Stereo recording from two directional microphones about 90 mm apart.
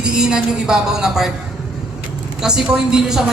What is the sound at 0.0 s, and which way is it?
A man's voice, 10° right (ahead or behind).